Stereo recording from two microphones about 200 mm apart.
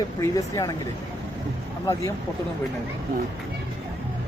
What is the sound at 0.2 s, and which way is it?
Speech, 15° left (ahead or behind).